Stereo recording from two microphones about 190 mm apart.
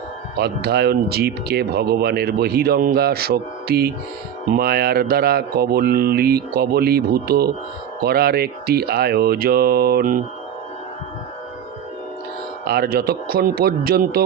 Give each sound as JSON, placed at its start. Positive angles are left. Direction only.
{"t": 0.3, "sound": "speech", "side_deg": -55}
{"t": 12.6, "sound": "a man's voice", "side_deg": -55}